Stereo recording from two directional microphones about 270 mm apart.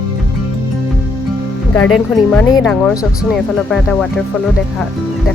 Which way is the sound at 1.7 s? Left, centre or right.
Centre.